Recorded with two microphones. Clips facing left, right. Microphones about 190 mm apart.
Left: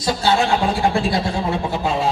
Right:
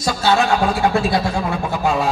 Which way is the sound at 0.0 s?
25° left (ahead or behind).